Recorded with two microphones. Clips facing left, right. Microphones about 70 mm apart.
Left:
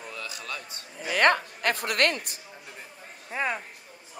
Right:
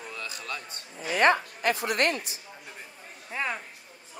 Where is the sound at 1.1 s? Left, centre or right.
Left.